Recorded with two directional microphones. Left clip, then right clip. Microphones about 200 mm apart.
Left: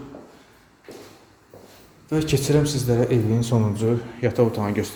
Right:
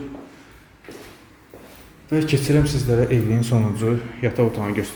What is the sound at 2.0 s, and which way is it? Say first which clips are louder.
A man's voice: right 2 dB; 10° left (ahead or behind).